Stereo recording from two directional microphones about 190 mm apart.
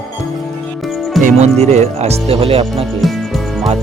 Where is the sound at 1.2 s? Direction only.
35° right (ahead or behind).